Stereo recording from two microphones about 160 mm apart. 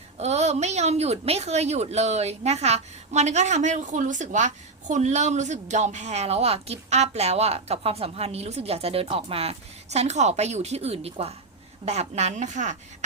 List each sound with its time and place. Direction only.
0.2 s a woman's voice: 45° right (ahead or behind)